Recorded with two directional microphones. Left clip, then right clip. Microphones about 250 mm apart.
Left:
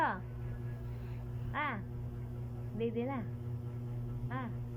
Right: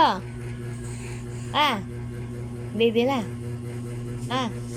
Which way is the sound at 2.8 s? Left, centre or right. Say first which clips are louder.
Right 16 dB; right.